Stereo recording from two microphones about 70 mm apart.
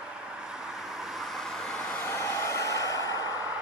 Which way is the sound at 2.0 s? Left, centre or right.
Left.